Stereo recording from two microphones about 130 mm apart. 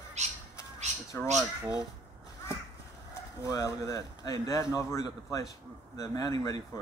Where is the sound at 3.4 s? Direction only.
25° left (ahead or behind).